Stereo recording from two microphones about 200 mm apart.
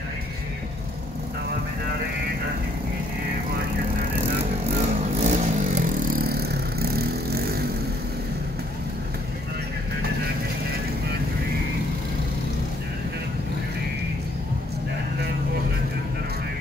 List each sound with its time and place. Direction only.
5.2 s vehicle: 35° right (ahead or behind)